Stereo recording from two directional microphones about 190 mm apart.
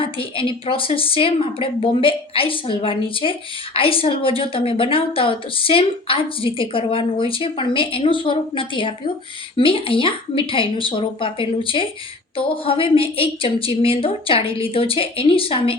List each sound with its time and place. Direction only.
0.0 s a woman's voice: 30° left (ahead or behind)